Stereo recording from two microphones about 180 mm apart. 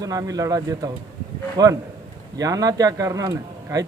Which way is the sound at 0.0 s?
20° right (ahead or behind).